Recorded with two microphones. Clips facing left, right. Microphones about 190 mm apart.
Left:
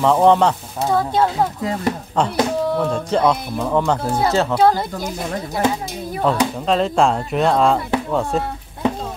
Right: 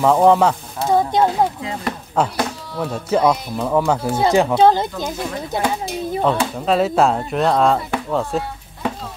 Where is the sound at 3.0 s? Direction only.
10° right (ahead or behind).